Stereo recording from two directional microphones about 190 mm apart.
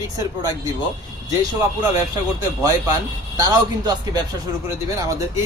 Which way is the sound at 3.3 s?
20° right (ahead or behind).